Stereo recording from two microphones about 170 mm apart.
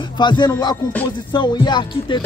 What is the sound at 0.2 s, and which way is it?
Speech, 25° left (ahead or behind).